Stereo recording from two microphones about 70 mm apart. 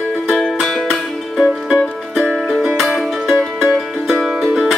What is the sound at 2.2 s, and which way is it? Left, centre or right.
Music, centre.